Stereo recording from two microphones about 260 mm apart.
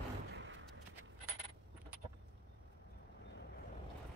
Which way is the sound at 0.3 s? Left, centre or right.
Right.